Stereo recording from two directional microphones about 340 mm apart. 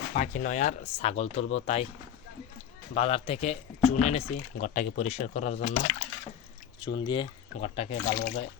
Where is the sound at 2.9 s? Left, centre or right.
Centre.